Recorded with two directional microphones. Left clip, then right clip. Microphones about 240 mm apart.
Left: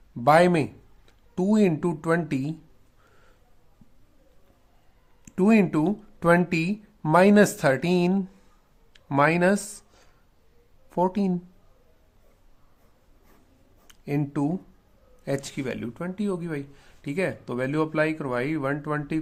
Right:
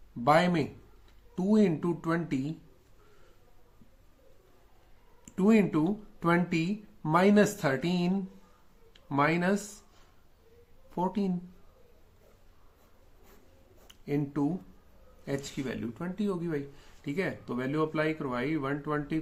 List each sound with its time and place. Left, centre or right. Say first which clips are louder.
0.3 s speech: left 6 dB; left
5.3 s speech: left 4 dB; left
10.9 s speech: left 7 dB; left
13.8 s speech: left 3 dB; left